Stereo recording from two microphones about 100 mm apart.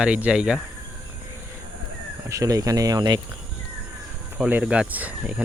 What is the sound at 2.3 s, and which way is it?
Speech, 35° right (ahead or behind).